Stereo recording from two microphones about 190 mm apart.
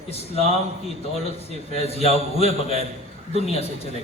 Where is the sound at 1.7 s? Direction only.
30° left (ahead or behind).